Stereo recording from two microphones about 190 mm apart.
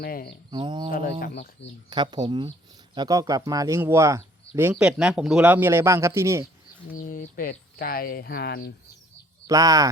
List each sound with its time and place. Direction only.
0.0 s speech: 50° left (ahead or behind)
0.5 s speech: 25° right (ahead or behind)
0.9 s speech: 45° left (ahead or behind)
1.2 s speech: 60° left (ahead or behind)
1.9 s a man's voice: 25° right (ahead or behind)
6.9 s speech: 45° left (ahead or behind)
9.5 s speech: 20° right (ahead or behind)